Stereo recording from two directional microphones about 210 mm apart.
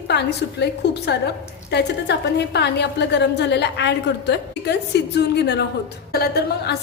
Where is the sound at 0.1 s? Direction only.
55° left (ahead or behind).